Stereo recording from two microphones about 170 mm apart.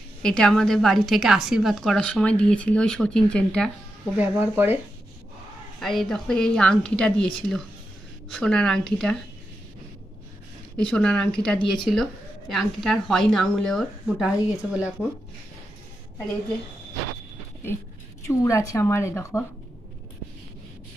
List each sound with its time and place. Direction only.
0.2 s a woman's voice: 5° left (ahead or behind)
4.2 s speech: 10° right (ahead or behind)
5.8 s a woman's voice: centre (ahead or behind)
10.8 s a woman's voice: 5° left (ahead or behind)
18.2 s a woman's voice: 20° left (ahead or behind)